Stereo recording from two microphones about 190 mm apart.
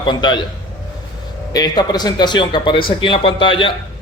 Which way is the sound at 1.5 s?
20° left (ahead or behind).